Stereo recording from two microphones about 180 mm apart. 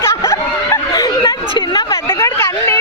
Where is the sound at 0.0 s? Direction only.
15° left (ahead or behind).